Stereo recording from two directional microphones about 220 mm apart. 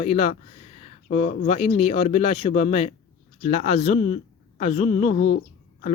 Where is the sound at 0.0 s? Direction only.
30° left (ahead or behind).